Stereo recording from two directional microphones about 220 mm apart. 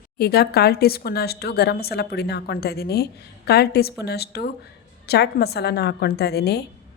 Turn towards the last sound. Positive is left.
turn(degrees=45)  # may be behind; listen again after turning